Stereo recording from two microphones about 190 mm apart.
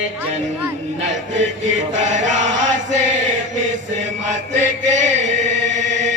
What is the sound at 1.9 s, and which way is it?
Chant, 40° right (ahead or behind).